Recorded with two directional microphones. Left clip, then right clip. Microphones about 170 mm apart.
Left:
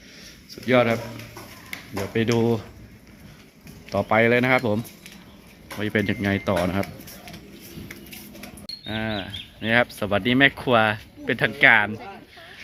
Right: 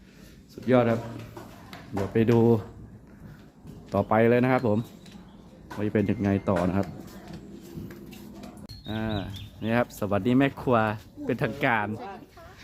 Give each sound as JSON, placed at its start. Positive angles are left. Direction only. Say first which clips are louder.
{"t": 0.7, "sound": "speech", "louder": "left 3 dB", "side_deg": -10}
{"t": 2.1, "sound": "speech", "louder": "even", "side_deg": -15}
{"t": 4.1, "sound": "speech", "louder": "left 4 dB", "side_deg": -5}
{"t": 5.8, "sound": "speech", "louder": "left 3 dB", "side_deg": -5}
{"t": 8.9, "sound": "speech", "louder": "left 4 dB", "side_deg": -5}